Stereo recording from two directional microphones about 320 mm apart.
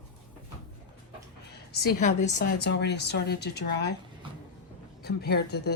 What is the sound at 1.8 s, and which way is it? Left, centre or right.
A woman's voice, left.